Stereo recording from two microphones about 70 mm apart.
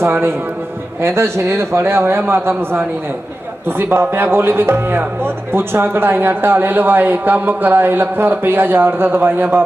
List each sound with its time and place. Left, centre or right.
0.0 s speech: right